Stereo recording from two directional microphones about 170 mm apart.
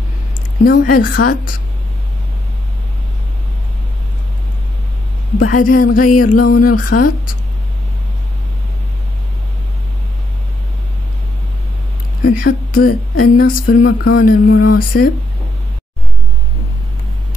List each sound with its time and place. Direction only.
0.7 s speech: 55° left (ahead or behind)
5.4 s a sound: 55° left (ahead or behind)
6.5 s speech: 55° left (ahead or behind)
12.3 s speech: 60° left (ahead or behind)
13.8 s speech: 90° left; by 15.0 s 60° left (ahead or behind)